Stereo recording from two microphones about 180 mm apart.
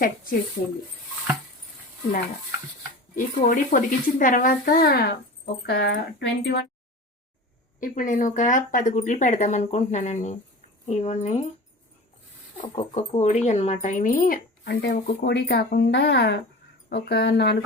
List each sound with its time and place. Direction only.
3.2 s speech: 50° left (ahead or behind)
5.6 s speech: 70° left (ahead or behind)
7.8 s speech: 45° left (ahead or behind)
12.6 s speech: 35° left (ahead or behind); by 17.6 s 65° left (ahead or behind)